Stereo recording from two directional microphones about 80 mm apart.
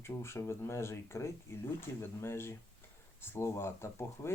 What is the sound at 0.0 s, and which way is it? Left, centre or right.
Speech, left.